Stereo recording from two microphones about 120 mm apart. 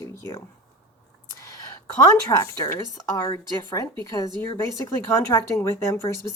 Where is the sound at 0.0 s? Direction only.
25° left (ahead or behind).